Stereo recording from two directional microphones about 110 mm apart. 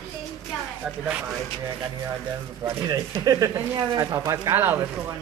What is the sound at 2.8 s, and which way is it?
Speech, 35° right (ahead or behind).